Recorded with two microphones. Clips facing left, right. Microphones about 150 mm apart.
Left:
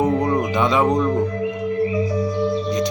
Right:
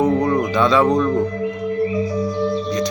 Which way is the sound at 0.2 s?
20° left (ahead or behind).